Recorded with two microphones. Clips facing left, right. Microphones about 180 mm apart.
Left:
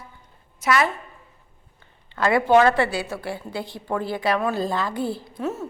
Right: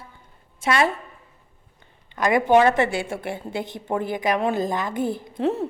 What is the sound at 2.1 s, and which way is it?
A woman's voice, 15° right (ahead or behind).